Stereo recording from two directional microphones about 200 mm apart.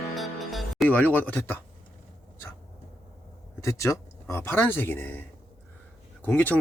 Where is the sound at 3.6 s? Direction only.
15° left (ahead or behind).